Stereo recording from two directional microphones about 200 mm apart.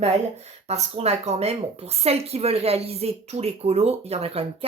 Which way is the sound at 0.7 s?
30° right (ahead or behind).